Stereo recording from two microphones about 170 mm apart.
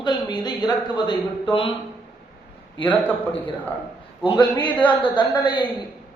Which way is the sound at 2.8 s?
10° left (ahead or behind).